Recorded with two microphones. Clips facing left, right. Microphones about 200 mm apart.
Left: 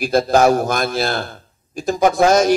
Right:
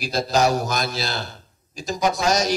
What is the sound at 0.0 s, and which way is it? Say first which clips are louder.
A man's voice: left 7 dB; 55° left (ahead or behind).